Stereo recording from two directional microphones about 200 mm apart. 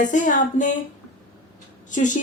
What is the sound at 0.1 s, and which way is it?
Speech, 40° left (ahead or behind).